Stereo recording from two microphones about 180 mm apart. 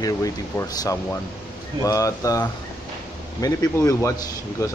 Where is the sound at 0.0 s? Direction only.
20° left (ahead or behind).